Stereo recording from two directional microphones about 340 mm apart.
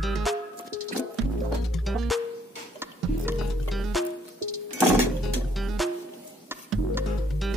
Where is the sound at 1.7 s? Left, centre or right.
Centre.